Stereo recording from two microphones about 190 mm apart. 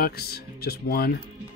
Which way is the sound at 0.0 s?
55° left (ahead or behind).